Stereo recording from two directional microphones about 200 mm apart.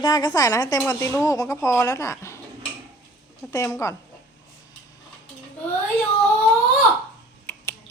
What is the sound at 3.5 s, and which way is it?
Speech, 15° left (ahead or behind).